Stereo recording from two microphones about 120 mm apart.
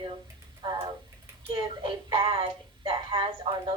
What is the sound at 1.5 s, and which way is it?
Speech, 45° right (ahead or behind).